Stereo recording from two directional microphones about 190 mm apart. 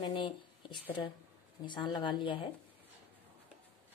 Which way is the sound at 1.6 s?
25° left (ahead or behind).